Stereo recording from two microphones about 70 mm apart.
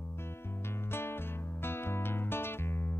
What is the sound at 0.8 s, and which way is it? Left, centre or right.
Music, left.